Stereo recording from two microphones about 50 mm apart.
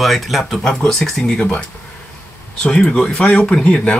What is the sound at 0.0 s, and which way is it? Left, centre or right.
Speech, centre.